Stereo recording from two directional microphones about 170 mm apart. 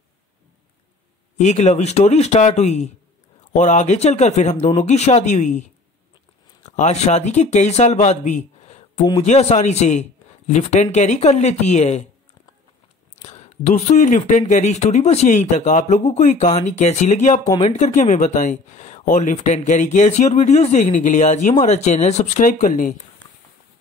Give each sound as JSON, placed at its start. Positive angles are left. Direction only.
{"t": 1.4, "sound": "speech", "side_deg": 45}
{"t": 13.1, "sound": "speech", "side_deg": 40}